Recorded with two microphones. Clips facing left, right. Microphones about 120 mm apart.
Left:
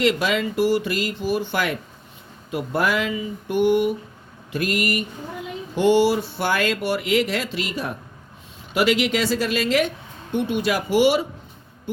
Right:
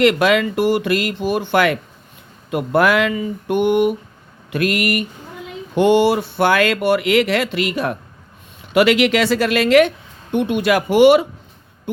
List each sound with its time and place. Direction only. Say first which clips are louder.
0.0 s speech: right 6 dB; 65° right (ahead or behind)